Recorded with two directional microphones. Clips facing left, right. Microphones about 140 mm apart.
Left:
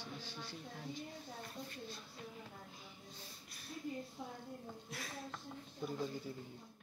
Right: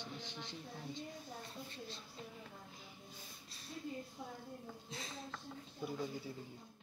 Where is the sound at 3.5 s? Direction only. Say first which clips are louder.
Left 1 dB; 25° right (ahead or behind).